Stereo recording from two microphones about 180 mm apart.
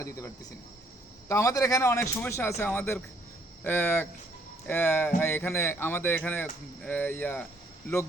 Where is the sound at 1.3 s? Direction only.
15° left (ahead or behind).